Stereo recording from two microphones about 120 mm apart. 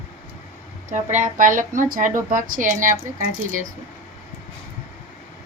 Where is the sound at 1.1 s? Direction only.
90° right.